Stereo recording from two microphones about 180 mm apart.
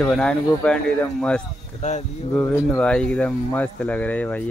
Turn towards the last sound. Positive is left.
turn(degrees=10)  # may be behind; listen again after turning